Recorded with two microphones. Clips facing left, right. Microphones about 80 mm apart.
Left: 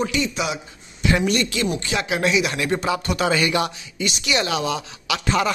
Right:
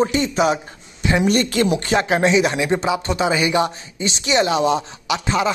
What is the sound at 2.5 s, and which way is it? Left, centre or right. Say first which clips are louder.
A man's voice: right 3 dB; centre.